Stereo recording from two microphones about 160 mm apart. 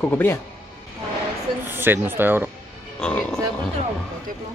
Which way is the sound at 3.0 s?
5° left (ahead or behind).